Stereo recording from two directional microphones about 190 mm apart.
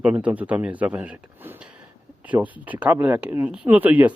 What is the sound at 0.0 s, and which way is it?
Speech, 5° right (ahead or behind).